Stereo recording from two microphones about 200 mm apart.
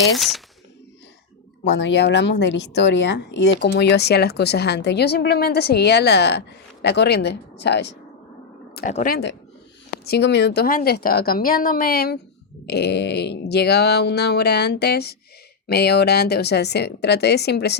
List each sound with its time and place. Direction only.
0.2 s speech: centre (ahead or behind)
1.6 s a woman's voice: 60° left (ahead or behind)
8.9 s speech: 35° left (ahead or behind)
10.1 s a woman's voice: 60° left (ahead or behind)